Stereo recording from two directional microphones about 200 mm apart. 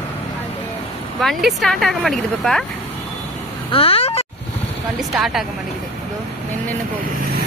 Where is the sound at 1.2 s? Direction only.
Centre (ahead or behind).